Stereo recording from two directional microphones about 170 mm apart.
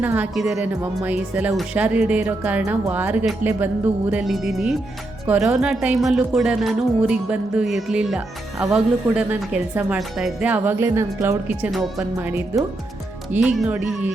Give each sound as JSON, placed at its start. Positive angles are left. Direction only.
{"t": 0.0, "sound": "a woman's voice", "side_deg": -10}